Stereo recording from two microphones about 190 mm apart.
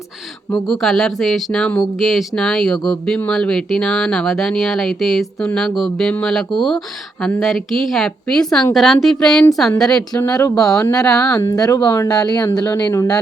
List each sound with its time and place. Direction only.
0.5 s speech: centre (ahead or behind)
10.2 s speech: 15° left (ahead or behind)
10.6 s speech: 5° left (ahead or behind)
11.3 s speech: 15° left (ahead or behind)